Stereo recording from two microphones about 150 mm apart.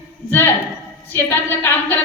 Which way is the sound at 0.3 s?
15° left (ahead or behind).